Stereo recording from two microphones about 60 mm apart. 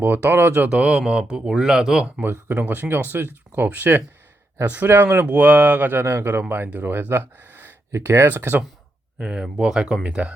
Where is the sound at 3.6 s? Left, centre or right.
Right.